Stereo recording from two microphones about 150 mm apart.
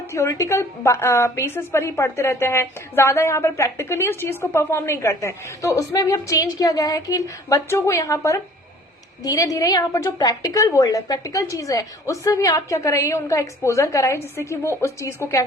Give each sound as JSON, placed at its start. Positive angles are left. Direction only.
{"t": 0.1, "sound": "a woman's voice", "side_deg": 20}